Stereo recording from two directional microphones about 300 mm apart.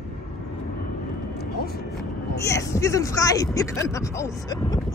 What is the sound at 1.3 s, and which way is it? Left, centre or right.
Vehicle, left.